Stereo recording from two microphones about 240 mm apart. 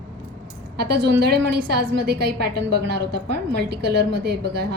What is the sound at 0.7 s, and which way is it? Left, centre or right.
A woman's voice, right.